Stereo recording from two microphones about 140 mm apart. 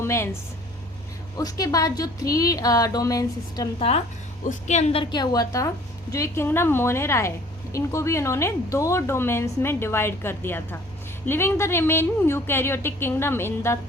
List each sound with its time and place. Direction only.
0.0 s speech: 20° left (ahead or behind)
1.4 s a woman's voice: 25° left (ahead or behind)
3.8 s a woman's voice: 45° left (ahead or behind)
4.4 s a woman's voice: 55° left (ahead or behind)
5.1 s a woman's voice: 30° left (ahead or behind)